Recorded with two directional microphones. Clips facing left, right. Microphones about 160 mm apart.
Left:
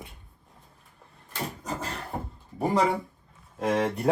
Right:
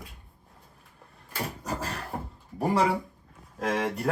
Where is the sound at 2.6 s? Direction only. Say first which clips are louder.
Even; centre (ahead or behind).